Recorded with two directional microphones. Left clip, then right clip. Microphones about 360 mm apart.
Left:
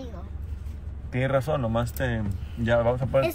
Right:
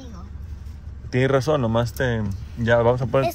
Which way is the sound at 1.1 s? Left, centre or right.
Right.